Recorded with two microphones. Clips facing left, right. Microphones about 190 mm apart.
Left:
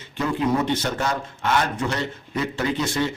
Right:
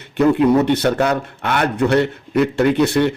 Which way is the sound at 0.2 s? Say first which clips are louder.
Right 9 dB; 65° right (ahead or behind).